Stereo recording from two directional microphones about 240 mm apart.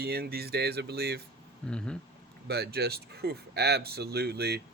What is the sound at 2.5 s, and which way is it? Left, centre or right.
Speech, right.